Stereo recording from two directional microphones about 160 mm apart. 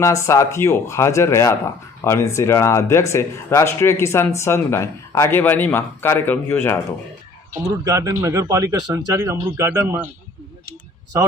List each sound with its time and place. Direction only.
0.3 s speech: 20° left (ahead or behind)
7.9 s speech: 20° right (ahead or behind)